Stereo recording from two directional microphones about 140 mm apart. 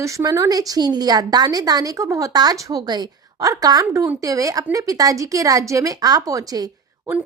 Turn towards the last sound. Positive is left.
turn(degrees=-25)  # may be behind; listen again after turning